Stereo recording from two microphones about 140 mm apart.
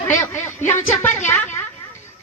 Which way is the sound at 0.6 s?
60° left (ahead or behind).